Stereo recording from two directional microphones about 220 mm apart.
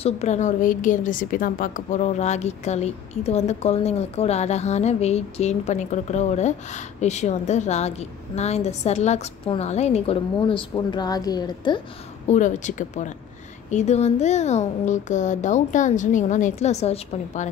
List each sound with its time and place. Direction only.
0.0 s a woman's voice: 30° left (ahead or behind)
12.3 s a woman's voice: 35° left (ahead or behind)